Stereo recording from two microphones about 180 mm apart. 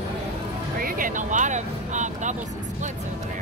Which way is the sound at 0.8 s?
50° right (ahead or behind).